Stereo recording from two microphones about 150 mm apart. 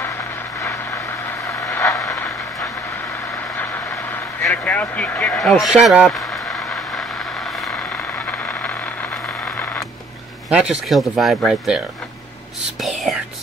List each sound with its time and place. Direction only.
1.5 s vehicle: 20° left (ahead or behind)
4.4 s speech: 15° left (ahead or behind)
10.5 s speech: 5° right (ahead or behind)
12.8 s whispering: centre (ahead or behind)